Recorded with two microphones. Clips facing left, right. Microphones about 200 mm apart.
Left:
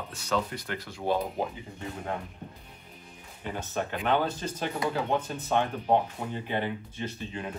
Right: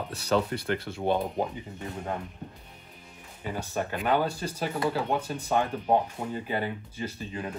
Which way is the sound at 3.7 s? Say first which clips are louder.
Right 1 dB; 10° right (ahead or behind).